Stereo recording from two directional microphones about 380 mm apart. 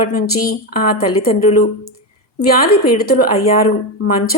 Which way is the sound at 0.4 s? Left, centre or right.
Left.